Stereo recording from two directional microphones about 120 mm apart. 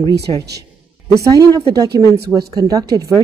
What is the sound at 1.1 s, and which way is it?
Speech, 30° right (ahead or behind).